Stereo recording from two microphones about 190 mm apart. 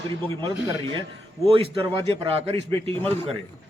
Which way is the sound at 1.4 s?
30° right (ahead or behind).